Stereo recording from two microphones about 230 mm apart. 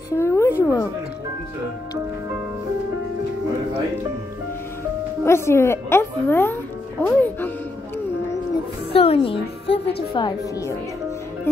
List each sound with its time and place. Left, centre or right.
0.1 s a woman's voice: centre
5.2 s speech: centre
8.9 s music: left
10.1 s a woman's voice: centre